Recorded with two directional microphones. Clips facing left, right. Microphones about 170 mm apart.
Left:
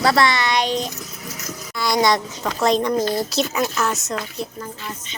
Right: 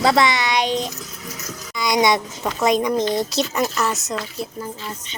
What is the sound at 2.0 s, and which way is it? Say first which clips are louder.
Speech: right 1 dB; 20° right (ahead or behind).